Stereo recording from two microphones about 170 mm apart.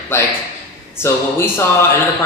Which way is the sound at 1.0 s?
15° left (ahead or behind).